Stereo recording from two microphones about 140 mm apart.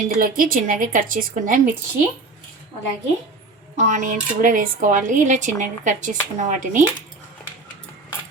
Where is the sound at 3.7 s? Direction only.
60° right (ahead or behind).